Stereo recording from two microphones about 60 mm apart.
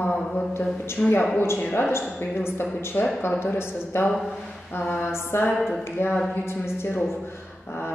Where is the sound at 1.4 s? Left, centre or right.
Left.